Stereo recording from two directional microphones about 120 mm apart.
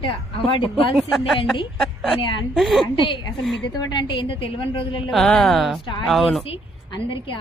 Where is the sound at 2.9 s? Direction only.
45° left (ahead or behind).